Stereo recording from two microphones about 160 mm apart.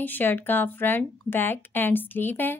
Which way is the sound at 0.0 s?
10° left (ahead or behind).